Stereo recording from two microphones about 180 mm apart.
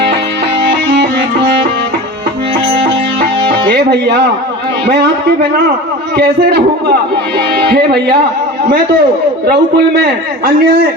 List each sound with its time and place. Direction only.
0.6 s music: 70° right (ahead or behind)
2.7 s music: 60° right (ahead or behind)
6.1 s a man's voice: 65° right (ahead or behind)
9.5 s a man's voice: 65° right (ahead or behind)